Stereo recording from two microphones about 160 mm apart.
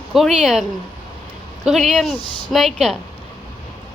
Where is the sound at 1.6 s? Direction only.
Centre (ahead or behind).